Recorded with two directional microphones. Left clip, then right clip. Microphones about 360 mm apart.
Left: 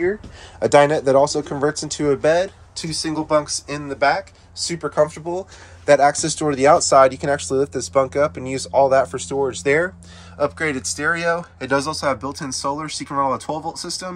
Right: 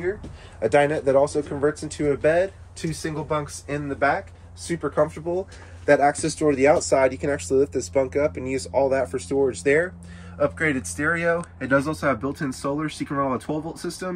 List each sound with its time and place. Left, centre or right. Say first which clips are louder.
0.6 s speech: left 6 dB; centre